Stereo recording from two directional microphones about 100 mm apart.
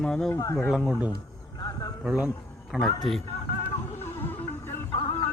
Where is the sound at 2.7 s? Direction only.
5° left (ahead or behind).